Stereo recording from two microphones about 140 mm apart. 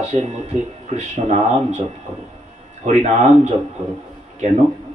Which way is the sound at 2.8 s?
55° right (ahead or behind).